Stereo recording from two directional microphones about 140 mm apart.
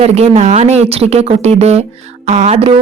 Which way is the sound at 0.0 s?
50° right (ahead or behind).